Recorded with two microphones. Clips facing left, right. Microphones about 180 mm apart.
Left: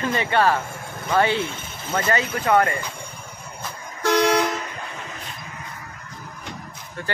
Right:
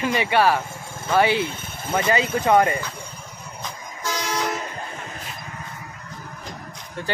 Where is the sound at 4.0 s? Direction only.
65° left (ahead or behind).